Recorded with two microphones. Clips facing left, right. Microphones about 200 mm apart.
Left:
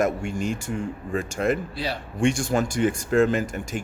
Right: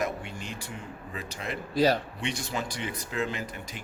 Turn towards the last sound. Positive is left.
turn(degrees=45)  # may be behind; listen again after turning